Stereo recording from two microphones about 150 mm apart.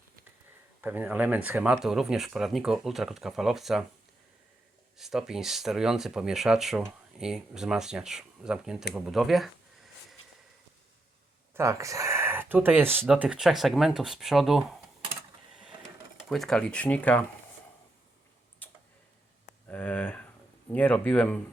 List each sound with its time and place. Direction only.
0.8 s speech: 10° right (ahead or behind)
4.9 s speech: centre (ahead or behind)
11.5 s speech: 20° right (ahead or behind); by 14.8 s centre (ahead or behind)
16.3 s speech: centre (ahead or behind)
18.6 s tick-tock: 10° left (ahead or behind)
19.6 s speech: 10° left (ahead or behind)